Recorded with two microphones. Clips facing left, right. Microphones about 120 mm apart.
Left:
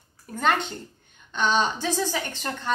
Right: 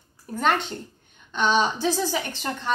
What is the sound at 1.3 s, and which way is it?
A woman's voice, centre (ahead or behind).